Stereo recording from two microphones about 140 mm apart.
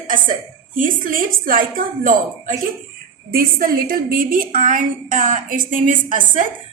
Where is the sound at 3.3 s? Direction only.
90° right; by 6.4 s 70° right (ahead or behind).